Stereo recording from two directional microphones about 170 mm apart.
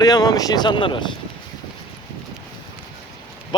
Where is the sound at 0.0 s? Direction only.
20° left (ahead or behind).